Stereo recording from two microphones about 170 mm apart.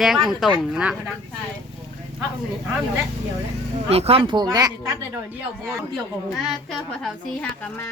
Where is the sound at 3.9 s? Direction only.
35° right (ahead or behind).